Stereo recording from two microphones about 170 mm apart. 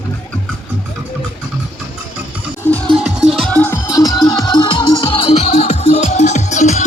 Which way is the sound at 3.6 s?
15° left (ahead or behind).